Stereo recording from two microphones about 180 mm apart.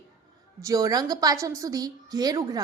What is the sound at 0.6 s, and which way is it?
A woman's voice, 20° right (ahead or behind).